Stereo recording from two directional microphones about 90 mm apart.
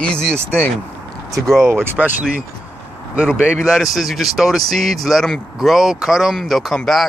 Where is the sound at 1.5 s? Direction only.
30° right (ahead or behind).